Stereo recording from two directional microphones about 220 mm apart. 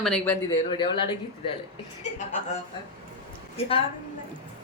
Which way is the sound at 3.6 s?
25° left (ahead or behind).